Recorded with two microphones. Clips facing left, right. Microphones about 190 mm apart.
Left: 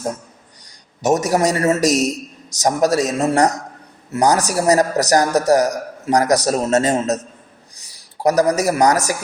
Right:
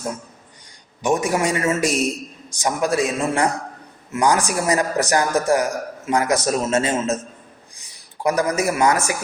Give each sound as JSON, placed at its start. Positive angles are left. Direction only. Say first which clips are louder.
{"t": 0.6, "sound": "a man's voice", "louder": "left 3 dB", "side_deg": 40}